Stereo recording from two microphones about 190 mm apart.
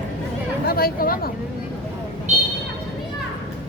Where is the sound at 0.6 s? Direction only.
55° left (ahead or behind).